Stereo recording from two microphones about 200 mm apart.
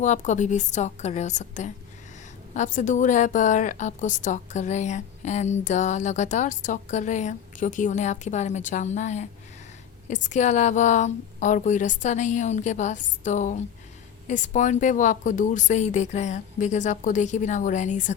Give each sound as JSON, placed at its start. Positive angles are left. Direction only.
{"t": 0.0, "sound": "a woman's voice", "side_deg": 35}